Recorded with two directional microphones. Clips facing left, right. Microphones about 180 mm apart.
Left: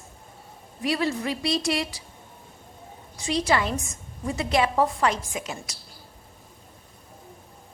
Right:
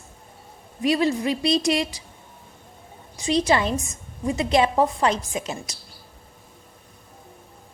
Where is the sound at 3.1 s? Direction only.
20° right (ahead or behind).